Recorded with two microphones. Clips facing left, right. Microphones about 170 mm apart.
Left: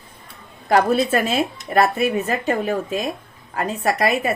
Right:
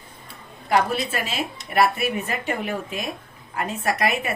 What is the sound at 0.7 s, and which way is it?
A woman's voice, 45° left (ahead or behind).